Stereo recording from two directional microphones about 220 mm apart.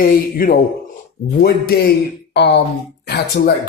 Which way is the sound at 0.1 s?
40° left (ahead or behind).